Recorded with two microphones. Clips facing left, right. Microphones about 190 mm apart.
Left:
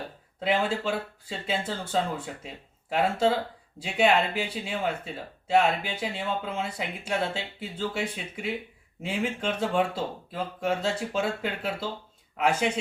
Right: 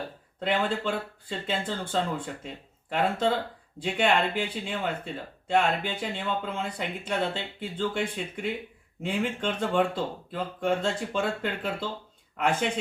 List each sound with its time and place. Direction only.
0.3 s speech: 5° left (ahead or behind)